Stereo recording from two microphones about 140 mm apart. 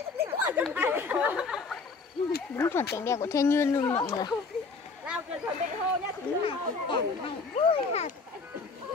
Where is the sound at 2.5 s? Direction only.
20° left (ahead or behind).